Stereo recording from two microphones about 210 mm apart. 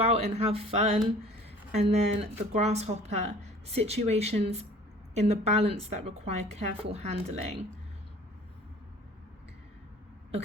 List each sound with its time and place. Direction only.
0.0 s a woman's voice: 30° right (ahead or behind)